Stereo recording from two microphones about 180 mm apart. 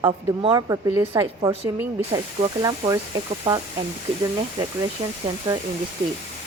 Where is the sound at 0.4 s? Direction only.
20° right (ahead or behind).